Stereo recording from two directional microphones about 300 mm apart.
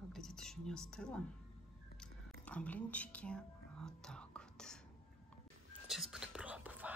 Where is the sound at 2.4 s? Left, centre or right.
Centre.